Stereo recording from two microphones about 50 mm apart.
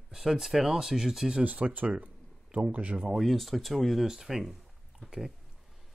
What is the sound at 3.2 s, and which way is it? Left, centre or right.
Speech, centre.